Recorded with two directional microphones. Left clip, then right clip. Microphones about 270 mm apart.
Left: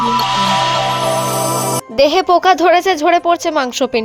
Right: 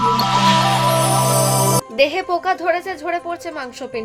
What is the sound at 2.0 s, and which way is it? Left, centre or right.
A woman's voice, left.